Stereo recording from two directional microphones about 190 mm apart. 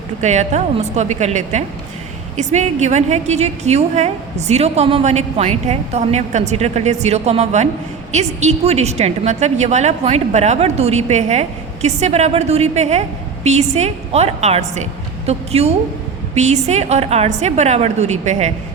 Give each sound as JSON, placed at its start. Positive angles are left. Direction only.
{"t": 0.2, "sound": "a woman's voice", "side_deg": -35}